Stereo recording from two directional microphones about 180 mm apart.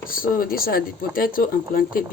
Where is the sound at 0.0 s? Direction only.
50° left (ahead or behind).